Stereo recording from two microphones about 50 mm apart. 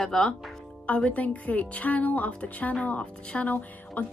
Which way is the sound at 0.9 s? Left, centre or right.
Left.